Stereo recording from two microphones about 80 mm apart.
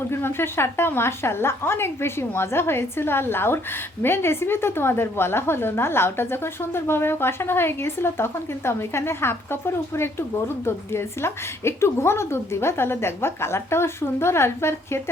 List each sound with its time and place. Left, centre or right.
0.1 s a woman's voice: left